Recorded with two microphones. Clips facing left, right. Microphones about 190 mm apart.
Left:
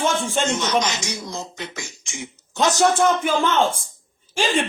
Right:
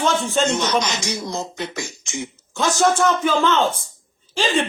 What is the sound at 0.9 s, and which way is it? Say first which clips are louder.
Speech: right 4 dB; 65° right (ahead or behind).